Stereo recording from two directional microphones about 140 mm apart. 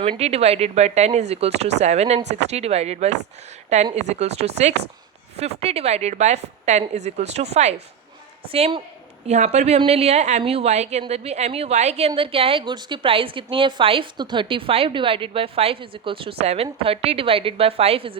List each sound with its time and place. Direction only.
0.2 s a woman's voice: 50° right (ahead or behind)